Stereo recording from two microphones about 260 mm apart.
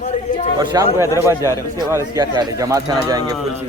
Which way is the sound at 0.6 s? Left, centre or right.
Centre.